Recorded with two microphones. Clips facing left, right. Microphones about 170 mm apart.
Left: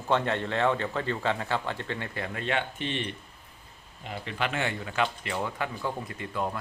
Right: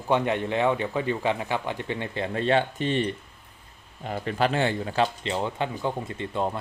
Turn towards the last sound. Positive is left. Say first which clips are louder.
# right 4 dB
turn(degrees=-25)  # may be behind; listen again after turning